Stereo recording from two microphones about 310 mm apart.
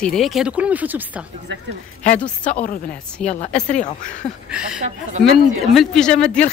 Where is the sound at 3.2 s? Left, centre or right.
Left.